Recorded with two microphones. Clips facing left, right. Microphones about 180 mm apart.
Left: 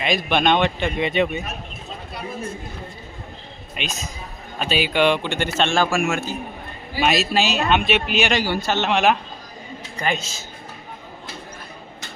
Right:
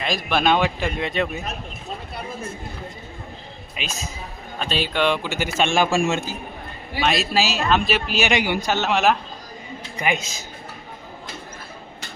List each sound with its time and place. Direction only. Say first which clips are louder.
0.0 s speech: left 2 dB; centre (ahead or behind)
3.8 s speech: left 1 dB; centre (ahead or behind)
5.5 s a man's voice: right 1 dB; 15° right (ahead or behind)
7.0 s speech: left 1 dB; centre (ahead or behind)
8.4 s speech: even; 15° right (ahead or behind)